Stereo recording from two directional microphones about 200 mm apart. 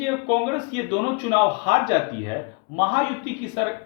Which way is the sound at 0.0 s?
25° right (ahead or behind).